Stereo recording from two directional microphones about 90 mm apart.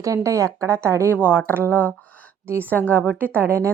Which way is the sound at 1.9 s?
15° left (ahead or behind).